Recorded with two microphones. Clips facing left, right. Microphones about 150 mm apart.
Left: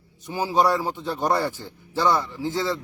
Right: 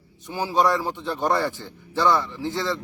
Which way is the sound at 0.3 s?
10° left (ahead or behind).